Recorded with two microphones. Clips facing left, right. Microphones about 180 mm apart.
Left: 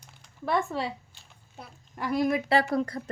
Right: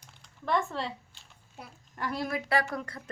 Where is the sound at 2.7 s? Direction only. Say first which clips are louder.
Left 9 dB; 35° left (ahead or behind).